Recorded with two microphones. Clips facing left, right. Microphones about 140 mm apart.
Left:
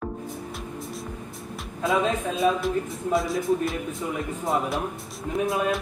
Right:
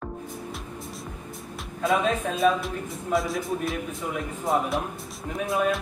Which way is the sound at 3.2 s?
Centre (ahead or behind).